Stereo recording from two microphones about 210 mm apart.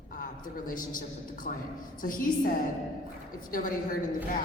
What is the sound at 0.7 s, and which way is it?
A woman's voice, 40° left (ahead or behind).